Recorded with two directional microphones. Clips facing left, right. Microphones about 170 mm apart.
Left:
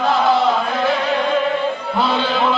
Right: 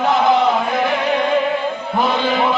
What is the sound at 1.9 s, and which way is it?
Chant, 15° right (ahead or behind).